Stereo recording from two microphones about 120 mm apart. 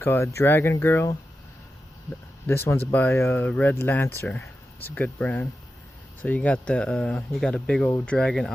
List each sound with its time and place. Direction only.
0.0 s speech: 25° left (ahead or behind)
2.5 s speech: 20° left (ahead or behind); by 8.5 s 5° left (ahead or behind)